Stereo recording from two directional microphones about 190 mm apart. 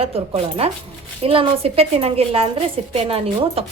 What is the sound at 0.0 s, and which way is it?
A woman's voice, 30° right (ahead or behind).